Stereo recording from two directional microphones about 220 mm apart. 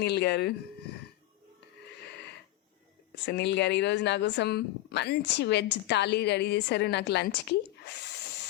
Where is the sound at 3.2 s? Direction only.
50° left (ahead or behind).